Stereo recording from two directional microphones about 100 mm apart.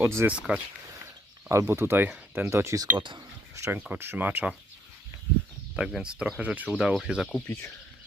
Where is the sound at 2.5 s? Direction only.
30° right (ahead or behind).